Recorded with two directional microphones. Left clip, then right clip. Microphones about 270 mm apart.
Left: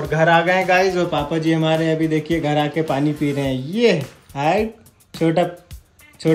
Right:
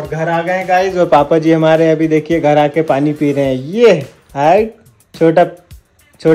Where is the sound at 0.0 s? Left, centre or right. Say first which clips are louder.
Left 1 dB; centre.